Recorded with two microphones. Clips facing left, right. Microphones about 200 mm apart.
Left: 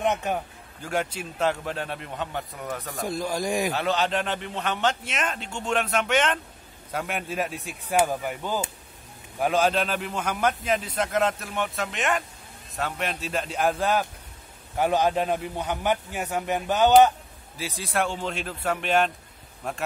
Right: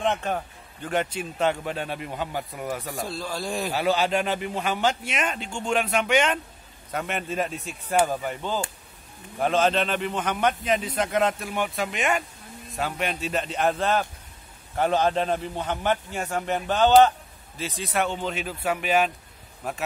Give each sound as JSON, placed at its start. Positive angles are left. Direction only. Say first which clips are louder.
{"t": 0.0, "sound": "a man's voice", "louder": "even", "side_deg": 15}
{"t": 0.8, "sound": "a man's voice", "louder": "right 2 dB", "side_deg": 5}
{"t": 3.0, "sound": "a man's voice", "louder": "left 3 dB", "side_deg": 15}
{"t": 3.7, "sound": "a man's voice", "louder": "right 2 dB", "side_deg": -5}
{"t": 17.6, "sound": "a man's voice", "louder": "right 1 dB", "side_deg": 0}